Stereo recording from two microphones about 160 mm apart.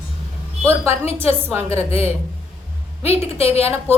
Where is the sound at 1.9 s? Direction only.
40° left (ahead or behind).